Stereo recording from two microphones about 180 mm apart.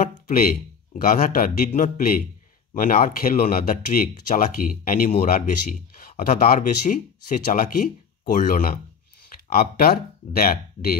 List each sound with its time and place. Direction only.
0.0 s speech: 55° left (ahead or behind)